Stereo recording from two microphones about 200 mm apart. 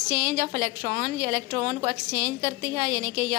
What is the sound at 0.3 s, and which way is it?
A woman's voice, 40° right (ahead or behind).